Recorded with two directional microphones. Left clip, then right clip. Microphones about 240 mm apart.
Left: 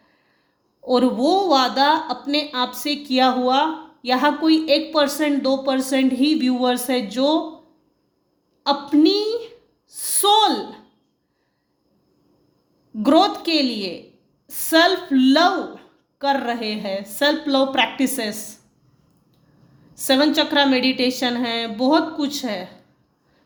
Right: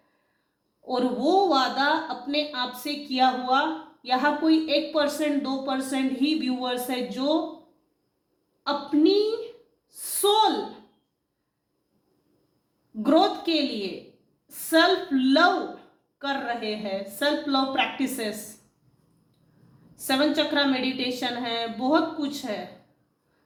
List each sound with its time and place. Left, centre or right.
0.9 s a woman's voice: left
8.6 s a woman's voice: left
9.9 s a sound: left
13.0 s a woman's voice: left
20.1 s a woman's voice: left